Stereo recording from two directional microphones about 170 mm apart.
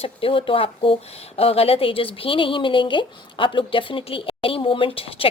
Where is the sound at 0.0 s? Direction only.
30° left (ahead or behind).